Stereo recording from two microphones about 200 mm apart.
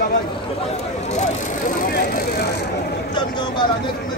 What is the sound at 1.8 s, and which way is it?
Vehicle, 50° left (ahead or behind).